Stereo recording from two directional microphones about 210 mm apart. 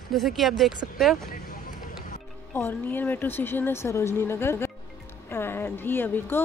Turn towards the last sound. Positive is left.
turn(degrees=10)  # may be behind; listen again after turning